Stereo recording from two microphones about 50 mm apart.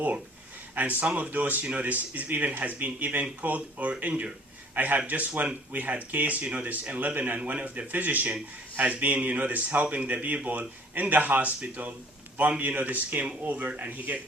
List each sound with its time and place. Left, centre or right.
0.8 s speech: right